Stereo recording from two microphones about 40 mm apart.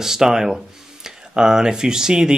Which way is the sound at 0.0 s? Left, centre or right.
Centre.